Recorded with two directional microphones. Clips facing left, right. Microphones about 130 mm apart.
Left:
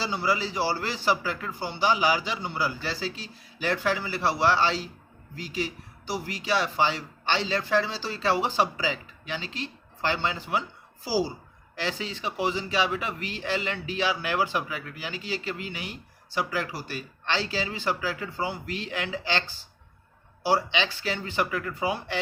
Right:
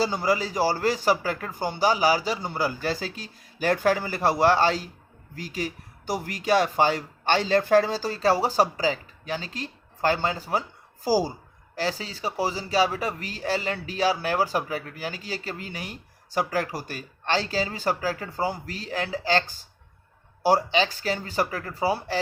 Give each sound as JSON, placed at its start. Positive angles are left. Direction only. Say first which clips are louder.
{"t": 0.0, "sound": "speech", "louder": "right 3 dB", "side_deg": -45}